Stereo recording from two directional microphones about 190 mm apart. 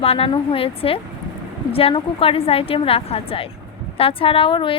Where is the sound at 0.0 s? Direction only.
30° left (ahead or behind).